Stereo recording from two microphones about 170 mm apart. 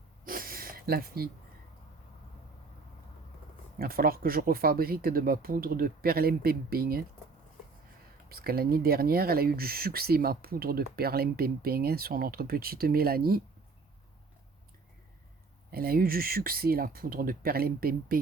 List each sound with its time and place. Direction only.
0.3 s a sound: 55° right (ahead or behind)
3.8 s speech: 60° right (ahead or behind)
8.3 s speech: 65° right (ahead or behind)
15.7 s speech: 60° right (ahead or behind)